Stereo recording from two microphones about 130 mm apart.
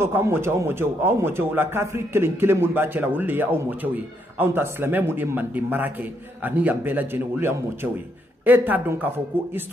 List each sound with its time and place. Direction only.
0.0 s a man's voice: 20° right (ahead or behind)